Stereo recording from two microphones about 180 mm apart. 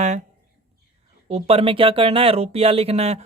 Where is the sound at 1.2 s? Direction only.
35° right (ahead or behind).